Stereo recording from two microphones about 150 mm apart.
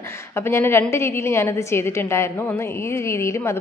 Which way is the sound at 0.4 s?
15° left (ahead or behind).